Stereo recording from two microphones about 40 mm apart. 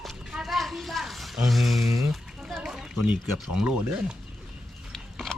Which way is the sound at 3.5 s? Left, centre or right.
Centre.